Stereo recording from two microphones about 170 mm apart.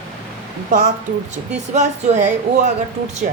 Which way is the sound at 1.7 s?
45° right (ahead or behind).